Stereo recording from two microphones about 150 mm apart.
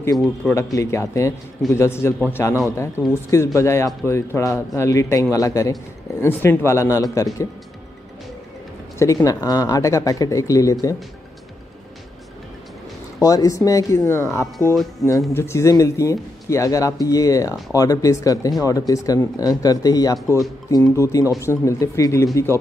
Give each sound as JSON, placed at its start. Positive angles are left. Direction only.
{"t": 0.0, "sound": "speech", "side_deg": 15}
{"t": 8.9, "sound": "speech", "side_deg": 20}
{"t": 13.2, "sound": "speech", "side_deg": 25}